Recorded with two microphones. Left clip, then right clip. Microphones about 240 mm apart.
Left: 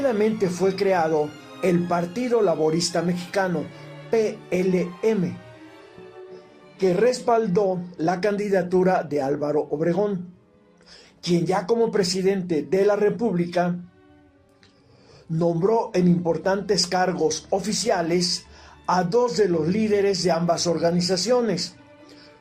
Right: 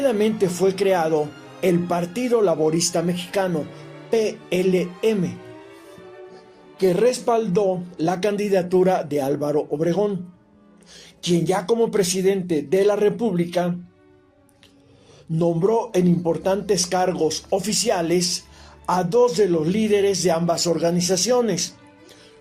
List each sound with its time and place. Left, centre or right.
0.0 s speech: right
4.8 s speech: right
6.7 s speech: right
11.3 s speech: right
15.4 s speech: right